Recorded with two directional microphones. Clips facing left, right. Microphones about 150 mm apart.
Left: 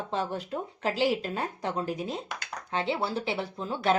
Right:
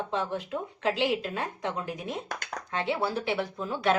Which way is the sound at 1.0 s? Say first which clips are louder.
Left 1 dB; 40° left (ahead or behind).